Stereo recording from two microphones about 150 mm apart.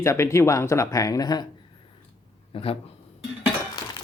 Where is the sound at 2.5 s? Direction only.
40° left (ahead or behind).